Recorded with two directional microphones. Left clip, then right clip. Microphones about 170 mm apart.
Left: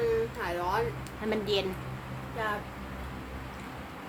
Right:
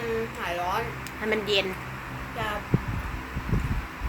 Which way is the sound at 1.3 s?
5° right (ahead or behind).